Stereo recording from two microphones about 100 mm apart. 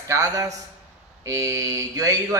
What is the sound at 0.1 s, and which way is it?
A man's voice, 30° right (ahead or behind).